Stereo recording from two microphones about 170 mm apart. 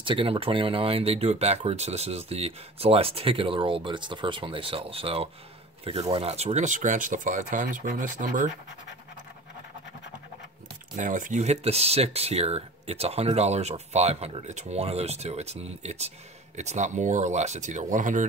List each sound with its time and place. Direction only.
0.0 s speech: 30° right (ahead or behind); by 8.5 s 50° right (ahead or behind)
11.0 s speech: 50° right (ahead or behind)